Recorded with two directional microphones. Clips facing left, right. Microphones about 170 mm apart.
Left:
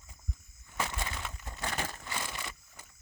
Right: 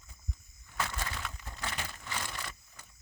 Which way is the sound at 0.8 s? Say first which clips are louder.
Left 1 dB; 20° left (ahead or behind).